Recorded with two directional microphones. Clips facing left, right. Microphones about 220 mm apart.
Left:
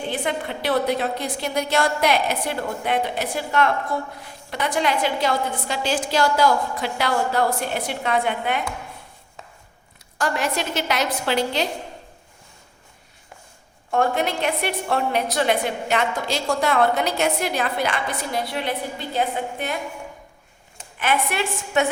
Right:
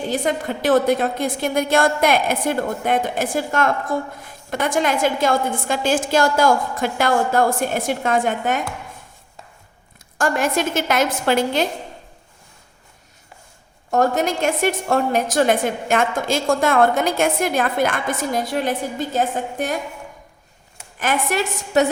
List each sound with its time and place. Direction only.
0.1 s a woman's voice: 45° right (ahead or behind)
10.2 s a woman's voice: 50° right (ahead or behind)
13.9 s a woman's voice: 40° right (ahead or behind)
21.0 s a woman's voice: 45° right (ahead or behind)